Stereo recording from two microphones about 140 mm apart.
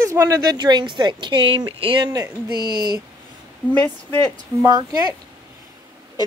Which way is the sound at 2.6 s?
90° right.